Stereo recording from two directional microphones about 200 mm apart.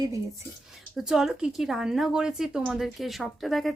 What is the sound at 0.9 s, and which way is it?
A woman's voice, centre (ahead or behind).